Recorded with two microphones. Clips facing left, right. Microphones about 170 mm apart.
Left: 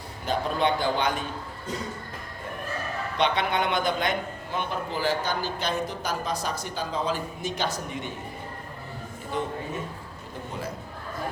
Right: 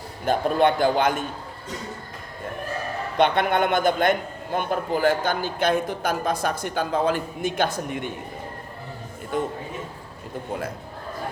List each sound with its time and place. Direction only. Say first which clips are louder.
0.3 s speech: right 5 dB; 50° right (ahead or behind)
3.2 s a man's voice: right 5 dB; 50° right (ahead or behind)
9.3 s speech: right 4 dB; 50° right (ahead or behind)